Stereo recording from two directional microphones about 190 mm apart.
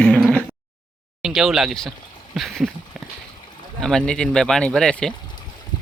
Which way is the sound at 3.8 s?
5° left (ahead or behind).